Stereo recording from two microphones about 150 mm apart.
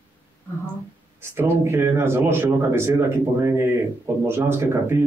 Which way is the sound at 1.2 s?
20° right (ahead or behind).